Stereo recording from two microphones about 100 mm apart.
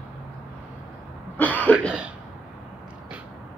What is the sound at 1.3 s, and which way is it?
Cough, 15° left (ahead or behind).